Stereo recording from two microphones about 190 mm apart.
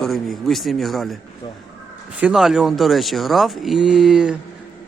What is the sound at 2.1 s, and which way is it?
Speech, 5° right (ahead or behind).